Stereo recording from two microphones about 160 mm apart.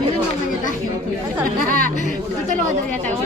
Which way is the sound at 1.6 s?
60° right (ahead or behind).